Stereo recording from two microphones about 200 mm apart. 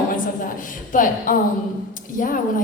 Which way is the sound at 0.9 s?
40° left (ahead or behind).